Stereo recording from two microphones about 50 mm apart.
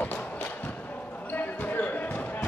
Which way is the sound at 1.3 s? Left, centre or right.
Left.